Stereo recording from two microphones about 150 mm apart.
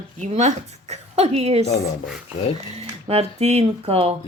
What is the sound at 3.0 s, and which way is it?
Speech, 45° right (ahead or behind).